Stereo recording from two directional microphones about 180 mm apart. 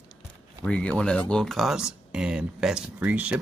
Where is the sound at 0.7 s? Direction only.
5° left (ahead or behind).